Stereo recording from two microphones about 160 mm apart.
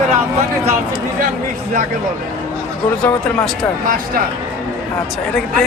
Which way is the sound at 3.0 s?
5° left (ahead or behind).